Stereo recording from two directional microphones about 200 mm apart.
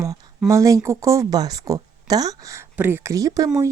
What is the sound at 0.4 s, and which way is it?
A woman's voice, 15° right (ahead or behind).